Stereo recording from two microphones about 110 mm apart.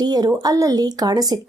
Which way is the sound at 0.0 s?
40° right (ahead or behind).